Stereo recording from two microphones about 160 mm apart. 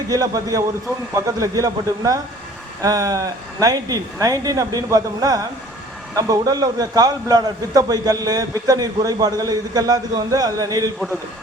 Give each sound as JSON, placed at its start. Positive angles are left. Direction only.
{"t": 0.1, "sound": "a man's voice", "side_deg": -25}